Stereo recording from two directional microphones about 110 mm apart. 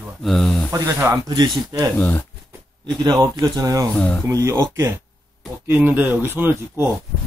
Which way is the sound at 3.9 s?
10° left (ahead or behind).